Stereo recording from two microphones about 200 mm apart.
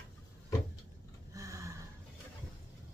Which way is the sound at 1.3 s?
15° right (ahead or behind).